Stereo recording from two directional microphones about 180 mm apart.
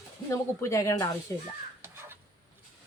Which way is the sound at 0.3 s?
15° left (ahead or behind).